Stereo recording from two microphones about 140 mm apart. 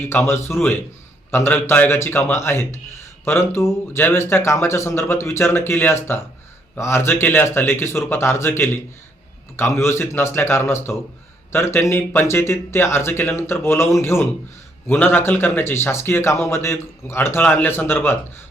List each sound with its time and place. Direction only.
0.0 s a man's voice: 15° left (ahead or behind)